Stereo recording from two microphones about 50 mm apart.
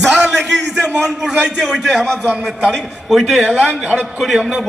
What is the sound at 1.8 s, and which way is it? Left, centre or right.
A man's voice, centre.